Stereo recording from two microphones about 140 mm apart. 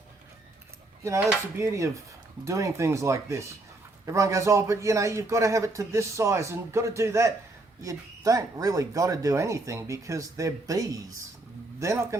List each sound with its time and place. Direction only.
1.5 s a man's voice: 20° right (ahead or behind)